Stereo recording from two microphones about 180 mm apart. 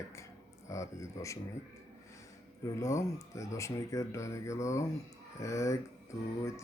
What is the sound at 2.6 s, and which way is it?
Speech, 15° left (ahead or behind).